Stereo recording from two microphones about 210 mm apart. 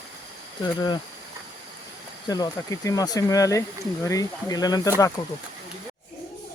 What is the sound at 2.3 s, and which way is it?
Speech, 15° left (ahead or behind).